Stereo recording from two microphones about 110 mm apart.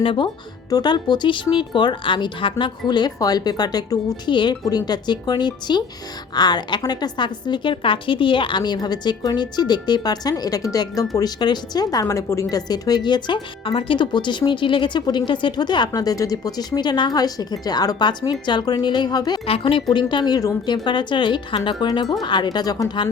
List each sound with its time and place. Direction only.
0.0 s speech: 50° left (ahead or behind)
0.7 s a woman's voice: 40° left (ahead or behind)
19.5 s speech: 55° left (ahead or behind); by 23.0 s 35° left (ahead or behind)